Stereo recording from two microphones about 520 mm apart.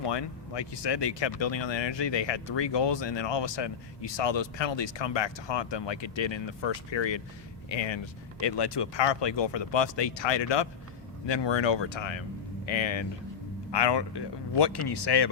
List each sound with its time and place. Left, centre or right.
0.0 s speech: left
13.7 s speech: left